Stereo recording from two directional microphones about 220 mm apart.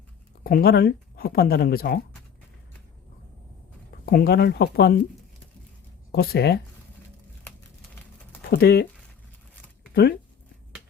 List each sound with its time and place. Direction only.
0.4 s speech: 40° left (ahead or behind)
4.0 s speech: 45° left (ahead or behind)
6.1 s speech: 45° left (ahead or behind)
8.4 s speech: 45° left (ahead or behind)
9.9 s speech: 50° left (ahead or behind)